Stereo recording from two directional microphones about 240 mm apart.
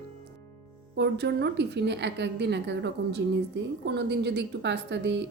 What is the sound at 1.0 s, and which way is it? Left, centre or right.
A woman's voice, right.